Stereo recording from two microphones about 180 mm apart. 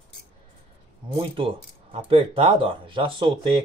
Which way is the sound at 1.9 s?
30° right (ahead or behind).